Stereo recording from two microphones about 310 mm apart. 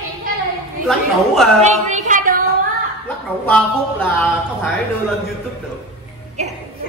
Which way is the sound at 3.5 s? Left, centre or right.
Centre.